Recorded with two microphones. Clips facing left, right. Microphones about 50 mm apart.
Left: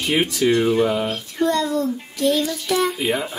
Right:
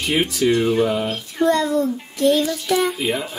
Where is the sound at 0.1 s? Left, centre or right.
Centre.